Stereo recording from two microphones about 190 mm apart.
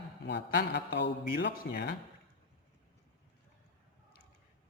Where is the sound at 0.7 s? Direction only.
65° left (ahead or behind).